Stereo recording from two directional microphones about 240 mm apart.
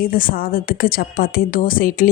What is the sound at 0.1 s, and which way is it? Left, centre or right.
A woman's voice, left.